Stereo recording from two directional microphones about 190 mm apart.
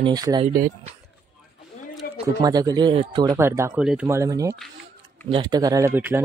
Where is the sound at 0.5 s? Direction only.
45° right (ahead or behind).